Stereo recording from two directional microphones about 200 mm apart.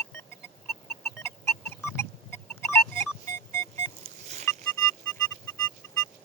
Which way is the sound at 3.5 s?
15° left (ahead or behind).